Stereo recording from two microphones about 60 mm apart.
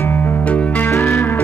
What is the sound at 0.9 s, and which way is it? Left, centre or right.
Music, left.